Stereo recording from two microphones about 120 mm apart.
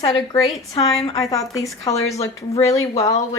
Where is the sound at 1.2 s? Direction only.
30° left (ahead or behind).